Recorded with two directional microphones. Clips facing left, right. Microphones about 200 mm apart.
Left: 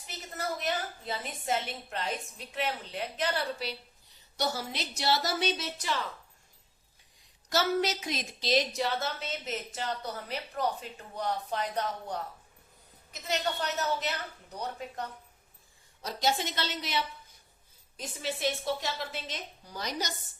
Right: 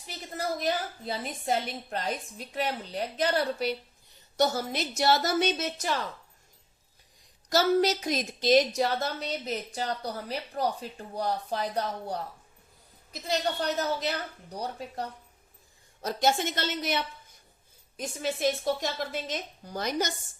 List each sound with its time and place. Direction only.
0.1 s a woman's voice: 35° right (ahead or behind)
7.5 s a woman's voice: 40° right (ahead or behind)
13.2 s a woman's voice: 35° right (ahead or behind)
16.0 s a woman's voice: 50° right (ahead or behind)